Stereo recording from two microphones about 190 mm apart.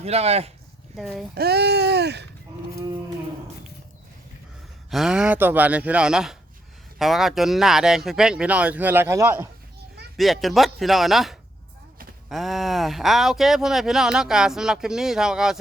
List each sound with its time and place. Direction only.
0.0 s speech: 35° right (ahead or behind)
0.9 s speech: centre (ahead or behind)
1.4 s a sound: 60° right (ahead or behind)
4.9 s speech: centre (ahead or behind)
10.2 s speech: centre (ahead or behind)